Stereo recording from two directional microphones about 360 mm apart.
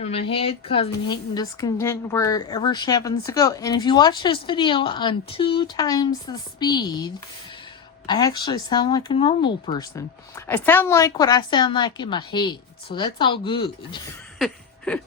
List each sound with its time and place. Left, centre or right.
0.0 s speech: centre
14.3 s chuckle: centre